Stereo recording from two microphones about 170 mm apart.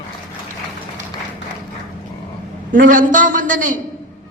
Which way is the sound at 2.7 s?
50° right (ahead or behind).